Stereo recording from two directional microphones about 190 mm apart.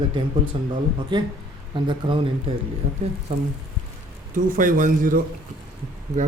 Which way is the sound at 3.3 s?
45° right (ahead or behind).